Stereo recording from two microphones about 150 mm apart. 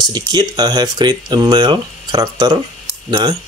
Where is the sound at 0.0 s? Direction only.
25° right (ahead or behind).